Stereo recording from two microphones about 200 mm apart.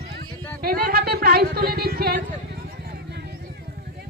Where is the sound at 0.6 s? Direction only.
50° right (ahead or behind).